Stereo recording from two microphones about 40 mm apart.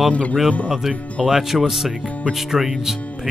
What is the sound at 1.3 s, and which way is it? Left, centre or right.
Speech, centre.